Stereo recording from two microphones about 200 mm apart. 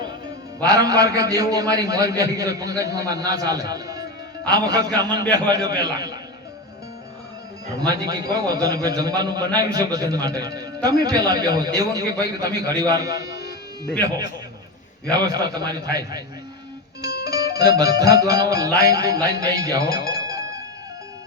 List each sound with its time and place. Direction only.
0.6 s a man's voice: 20° right (ahead or behind)
7.8 s a man's voice: 20° right (ahead or behind)
15.1 s a man's voice: 20° right (ahead or behind)
17.0 s music: 50° left (ahead or behind)
17.3 s music: 20° right (ahead or behind)
18.8 s a man's voice: 20° right (ahead or behind)